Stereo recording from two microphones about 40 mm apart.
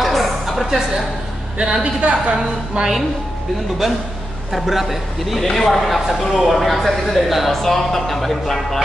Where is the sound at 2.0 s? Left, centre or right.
Right.